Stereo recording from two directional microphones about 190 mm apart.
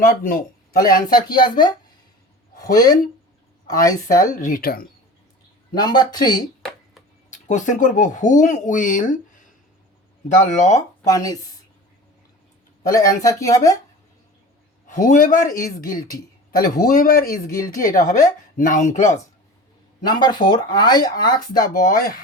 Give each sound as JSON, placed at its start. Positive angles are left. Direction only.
{"t": 0.0, "sound": "speech", "side_deg": 50}
{"t": 1.1, "sound": "speech", "side_deg": 25}
{"t": 2.7, "sound": "speech", "side_deg": 20}
{"t": 4.4, "sound": "speech", "side_deg": 45}
{"t": 5.7, "sound": "speech", "side_deg": 20}
{"t": 7.3, "sound": "speech", "side_deg": 40}
{"t": 10.2, "sound": "speech", "side_deg": 40}
{"t": 10.8, "sound": "speech", "side_deg": 15}
{"t": 12.8, "sound": "speech", "side_deg": 20}
{"t": 14.8, "sound": "speech", "side_deg": 40}
{"t": 20.1, "sound": "speech", "side_deg": 20}
{"t": 21.7, "sound": "speech", "side_deg": 45}